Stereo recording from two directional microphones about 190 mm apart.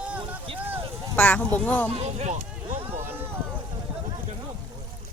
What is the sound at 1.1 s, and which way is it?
Speech, 10° left (ahead or behind).